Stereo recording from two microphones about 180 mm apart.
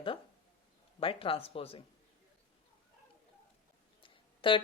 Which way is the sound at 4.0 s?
30° left (ahead or behind).